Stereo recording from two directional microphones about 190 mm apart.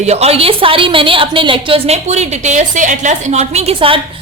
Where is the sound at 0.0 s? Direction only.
35° right (ahead or behind).